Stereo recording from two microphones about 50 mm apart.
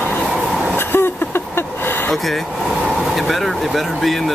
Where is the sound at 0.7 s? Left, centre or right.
Left.